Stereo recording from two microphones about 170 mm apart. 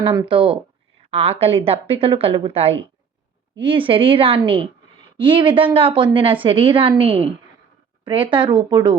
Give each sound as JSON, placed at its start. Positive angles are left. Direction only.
{"t": 0.0, "sound": "a woman's voice", "side_deg": -30}